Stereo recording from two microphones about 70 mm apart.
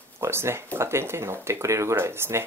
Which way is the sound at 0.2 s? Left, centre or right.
Right.